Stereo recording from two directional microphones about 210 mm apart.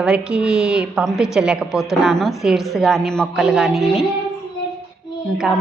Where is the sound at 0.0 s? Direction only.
5° right (ahead or behind).